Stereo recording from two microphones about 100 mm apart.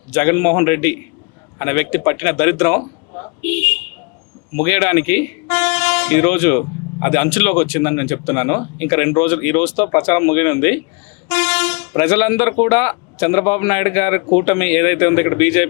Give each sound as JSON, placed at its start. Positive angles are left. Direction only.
{"t": 0.1, "sound": "speech", "side_deg": 25}
{"t": 3.1, "sound": "a sound", "side_deg": 40}
{"t": 3.4, "sound": "speech", "side_deg": 20}